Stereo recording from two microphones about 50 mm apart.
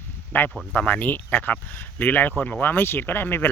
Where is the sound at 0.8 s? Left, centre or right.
Left.